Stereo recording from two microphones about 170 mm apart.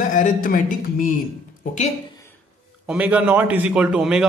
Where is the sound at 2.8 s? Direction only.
10° right (ahead or behind).